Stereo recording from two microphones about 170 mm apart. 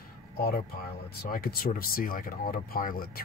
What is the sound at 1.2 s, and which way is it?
Speech, 55° left (ahead or behind).